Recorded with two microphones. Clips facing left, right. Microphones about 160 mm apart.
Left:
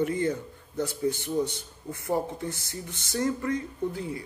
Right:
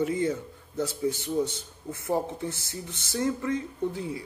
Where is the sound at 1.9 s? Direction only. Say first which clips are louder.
Even; 20° right (ahead or behind).